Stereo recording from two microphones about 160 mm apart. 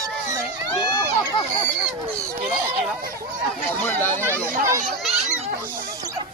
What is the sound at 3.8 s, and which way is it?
Speech, 15° left (ahead or behind).